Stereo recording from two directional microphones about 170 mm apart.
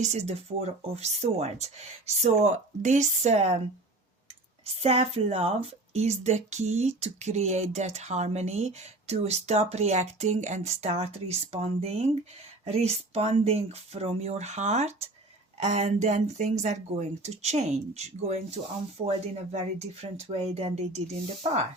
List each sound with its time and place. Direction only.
0.0 s a woman's voice: 40° right (ahead or behind)
4.6 s a woman's voice: 35° right (ahead or behind)